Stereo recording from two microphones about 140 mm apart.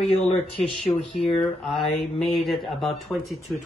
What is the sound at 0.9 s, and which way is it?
Speech, 30° left (ahead or behind).